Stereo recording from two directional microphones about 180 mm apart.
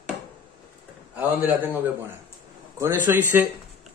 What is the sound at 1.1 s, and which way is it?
Speech, 10° right (ahead or behind).